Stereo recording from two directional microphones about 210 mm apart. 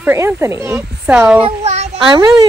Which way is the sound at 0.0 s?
10° right (ahead or behind).